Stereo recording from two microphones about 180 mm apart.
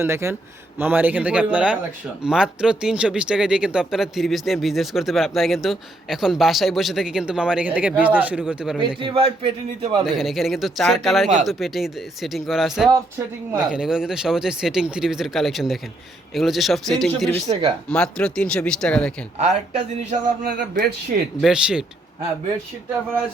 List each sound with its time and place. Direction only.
0.0 s speech: 15° right (ahead or behind)
9.0 s a man's voice: 30° right (ahead or behind)
10.1 s speech: centre (ahead or behind)
12.9 s speech: 15° right (ahead or behind); by 17.4 s 5° left (ahead or behind)
17.4 s a man's voice: 20° right (ahead or behind)
17.8 s speech: 5° left (ahead or behind)
20.1 s speech: 50° right (ahead or behind)
21.4 s speech: 5° right (ahead or behind)